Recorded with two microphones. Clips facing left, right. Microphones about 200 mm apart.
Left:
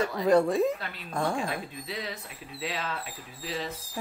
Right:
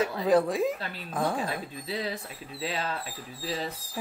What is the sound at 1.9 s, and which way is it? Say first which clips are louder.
Speech: right 7 dB; 30° right (ahead or behind).